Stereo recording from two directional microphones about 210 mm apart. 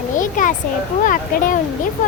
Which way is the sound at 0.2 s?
40° left (ahead or behind).